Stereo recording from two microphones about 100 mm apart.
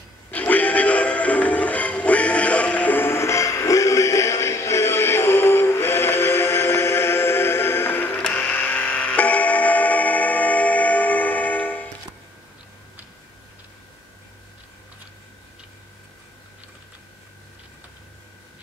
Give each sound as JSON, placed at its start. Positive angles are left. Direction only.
{"t": 0.3, "sound": "music", "side_deg": 15}